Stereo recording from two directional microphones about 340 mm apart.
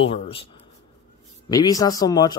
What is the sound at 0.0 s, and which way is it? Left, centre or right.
Speech, centre.